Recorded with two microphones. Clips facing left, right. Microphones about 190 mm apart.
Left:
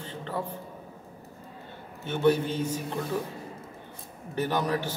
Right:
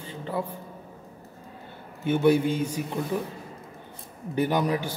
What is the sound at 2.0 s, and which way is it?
Speech, 10° right (ahead or behind).